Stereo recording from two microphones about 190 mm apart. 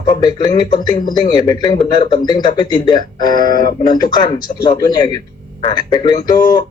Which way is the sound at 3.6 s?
45° left (ahead or behind).